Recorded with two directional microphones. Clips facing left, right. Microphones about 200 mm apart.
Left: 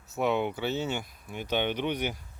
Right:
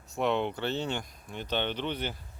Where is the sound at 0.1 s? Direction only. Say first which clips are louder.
Left 1 dB; 5° left (ahead or behind).